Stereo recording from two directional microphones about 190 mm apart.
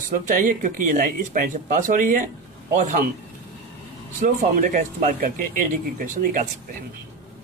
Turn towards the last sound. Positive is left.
turn(degrees=-45)  # may be behind; listen again after turning